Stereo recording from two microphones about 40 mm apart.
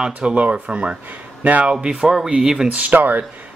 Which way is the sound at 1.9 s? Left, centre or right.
Centre.